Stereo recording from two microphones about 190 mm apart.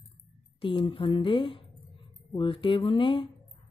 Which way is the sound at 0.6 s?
25° left (ahead or behind).